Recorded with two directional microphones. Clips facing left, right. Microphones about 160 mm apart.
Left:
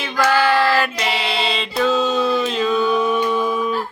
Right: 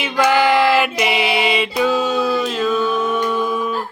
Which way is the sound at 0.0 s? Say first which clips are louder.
Right 2 dB; 15° right (ahead or behind).